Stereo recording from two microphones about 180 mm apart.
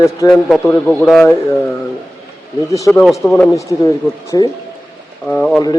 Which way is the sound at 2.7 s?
15° left (ahead or behind).